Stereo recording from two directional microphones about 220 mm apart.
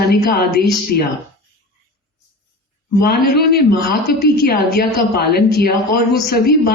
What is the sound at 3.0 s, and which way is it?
Speech, 45° left (ahead or behind).